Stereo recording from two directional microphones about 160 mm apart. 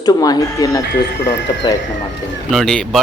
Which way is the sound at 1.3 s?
90° left.